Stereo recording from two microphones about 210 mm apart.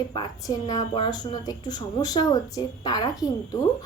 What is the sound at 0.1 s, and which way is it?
A woman's voice, 20° left (ahead or behind).